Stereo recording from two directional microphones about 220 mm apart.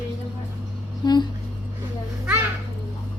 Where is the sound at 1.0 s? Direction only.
20° left (ahead or behind).